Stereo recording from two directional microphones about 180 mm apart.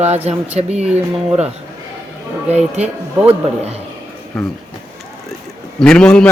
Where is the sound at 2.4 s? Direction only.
35° right (ahead or behind).